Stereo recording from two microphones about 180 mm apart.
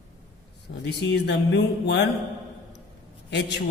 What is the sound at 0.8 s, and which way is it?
Speech, 70° left (ahead or behind).